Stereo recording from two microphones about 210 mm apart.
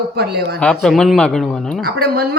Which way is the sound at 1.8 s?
50° right (ahead or behind).